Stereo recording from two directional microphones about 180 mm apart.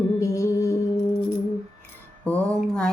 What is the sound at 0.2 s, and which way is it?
Music, 15° left (ahead or behind).